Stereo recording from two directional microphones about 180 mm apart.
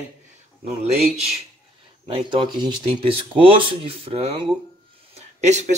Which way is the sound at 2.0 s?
30° right (ahead or behind).